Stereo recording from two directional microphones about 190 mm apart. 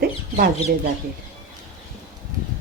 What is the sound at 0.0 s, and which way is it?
Chicken, 50° right (ahead or behind).